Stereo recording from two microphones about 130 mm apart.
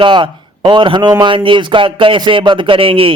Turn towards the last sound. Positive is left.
turn(degrees=-45)  # may be behind; listen again after turning